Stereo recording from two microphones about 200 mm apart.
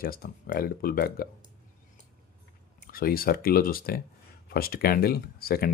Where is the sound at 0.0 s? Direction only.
45° left (ahead or behind).